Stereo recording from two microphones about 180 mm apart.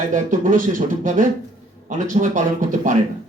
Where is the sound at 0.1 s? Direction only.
45° right (ahead or behind).